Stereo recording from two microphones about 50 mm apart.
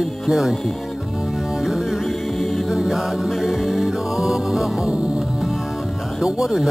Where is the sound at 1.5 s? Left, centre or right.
Centre.